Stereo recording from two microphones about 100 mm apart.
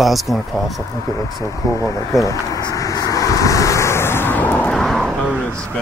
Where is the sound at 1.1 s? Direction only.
35° left (ahead or behind).